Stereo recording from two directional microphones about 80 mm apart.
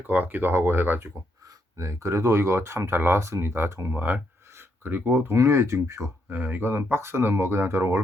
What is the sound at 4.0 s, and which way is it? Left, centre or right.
Speech, right.